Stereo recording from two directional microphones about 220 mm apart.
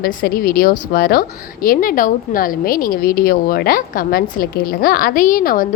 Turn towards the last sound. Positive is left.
turn(degrees=40)  # may be behind; listen again after turning